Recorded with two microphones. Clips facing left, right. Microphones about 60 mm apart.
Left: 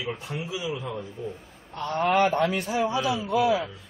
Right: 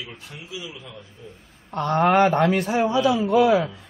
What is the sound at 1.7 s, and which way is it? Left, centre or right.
A man's voice, right.